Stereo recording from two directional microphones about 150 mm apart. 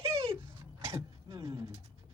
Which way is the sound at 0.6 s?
20° right (ahead or behind).